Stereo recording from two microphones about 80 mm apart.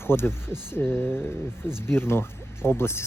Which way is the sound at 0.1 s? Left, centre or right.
Left.